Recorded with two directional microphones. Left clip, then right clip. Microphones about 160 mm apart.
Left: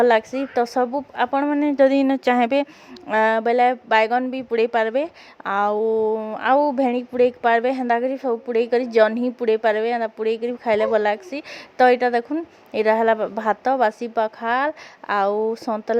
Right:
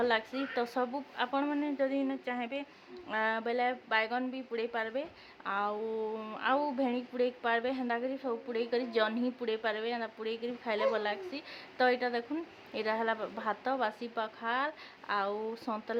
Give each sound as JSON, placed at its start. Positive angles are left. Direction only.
{"t": 0.0, "sound": "a woman's voice", "side_deg": 40}
{"t": 1.7, "sound": "speech", "side_deg": 60}
{"t": 3.1, "sound": "a woman's voice", "side_deg": 45}
{"t": 6.4, "sound": "a woman's voice", "side_deg": 45}